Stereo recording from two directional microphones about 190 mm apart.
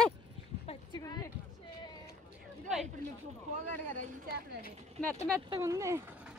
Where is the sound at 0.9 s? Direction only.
20° left (ahead or behind).